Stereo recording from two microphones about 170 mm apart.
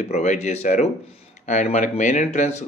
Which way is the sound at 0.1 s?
45° left (ahead or behind).